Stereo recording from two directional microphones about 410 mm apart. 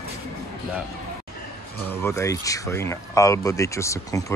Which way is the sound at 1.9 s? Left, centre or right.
Centre.